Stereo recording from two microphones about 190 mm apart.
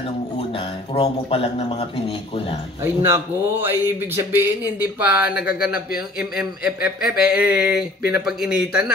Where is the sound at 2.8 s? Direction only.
10° right (ahead or behind).